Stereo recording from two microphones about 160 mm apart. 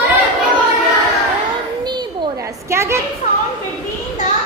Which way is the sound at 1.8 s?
30° right (ahead or behind).